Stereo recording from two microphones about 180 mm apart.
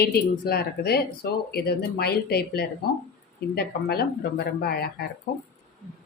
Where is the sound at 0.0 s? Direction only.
60° left (ahead or behind).